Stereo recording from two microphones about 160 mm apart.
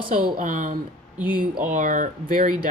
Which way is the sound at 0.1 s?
55° right (ahead or behind).